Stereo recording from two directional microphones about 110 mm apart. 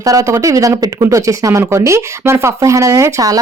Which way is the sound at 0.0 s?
30° right (ahead or behind).